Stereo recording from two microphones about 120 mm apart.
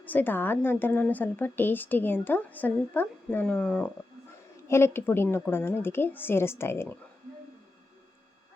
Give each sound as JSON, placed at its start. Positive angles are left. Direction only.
{"t": 0.0, "sound": "a woman's voice", "side_deg": 15}
{"t": 4.7, "sound": "a woman's voice", "side_deg": 20}